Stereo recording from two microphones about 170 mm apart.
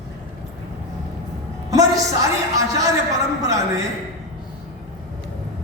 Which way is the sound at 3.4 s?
20° right (ahead or behind).